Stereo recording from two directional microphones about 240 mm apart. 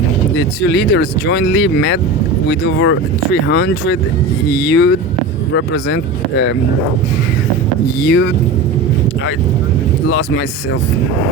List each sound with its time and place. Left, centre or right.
0.3 s speech: left
8.0 s speech: left
10.1 s speech: left